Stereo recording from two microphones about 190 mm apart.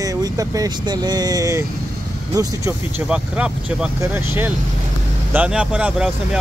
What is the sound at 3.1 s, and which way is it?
Speech, 5° right (ahead or behind).